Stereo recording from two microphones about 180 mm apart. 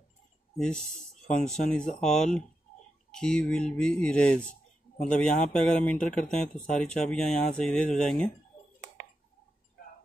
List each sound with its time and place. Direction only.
0.6 s speech: 5° left (ahead or behind)